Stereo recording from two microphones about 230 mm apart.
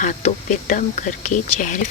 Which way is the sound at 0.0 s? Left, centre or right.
Left.